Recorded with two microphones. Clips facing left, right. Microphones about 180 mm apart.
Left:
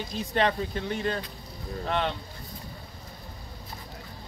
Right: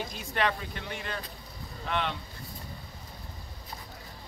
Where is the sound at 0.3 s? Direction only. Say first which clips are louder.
Left 4 dB; 35° left (ahead or behind).